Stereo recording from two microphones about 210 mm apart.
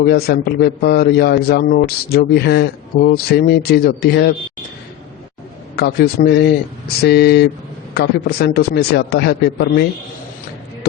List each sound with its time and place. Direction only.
0.0 s a man's voice: 50° left (ahead or behind)
5.7 s a man's voice: 50° left (ahead or behind)